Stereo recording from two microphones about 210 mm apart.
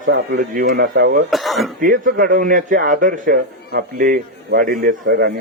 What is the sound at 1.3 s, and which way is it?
Speech, centre (ahead or behind).